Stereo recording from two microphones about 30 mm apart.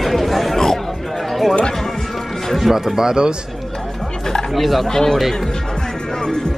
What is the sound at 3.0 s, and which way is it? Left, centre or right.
Speech, right.